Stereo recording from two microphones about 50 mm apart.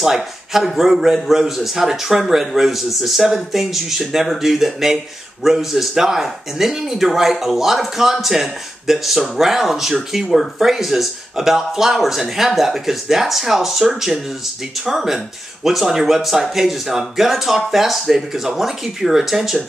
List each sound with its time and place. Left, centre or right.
0.0 s a man's voice: centre